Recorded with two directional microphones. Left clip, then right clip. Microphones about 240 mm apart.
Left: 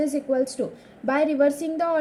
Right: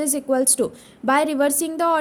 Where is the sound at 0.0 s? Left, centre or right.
Right.